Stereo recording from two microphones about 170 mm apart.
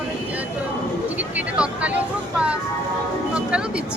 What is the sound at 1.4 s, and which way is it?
Speech, 5° right (ahead or behind).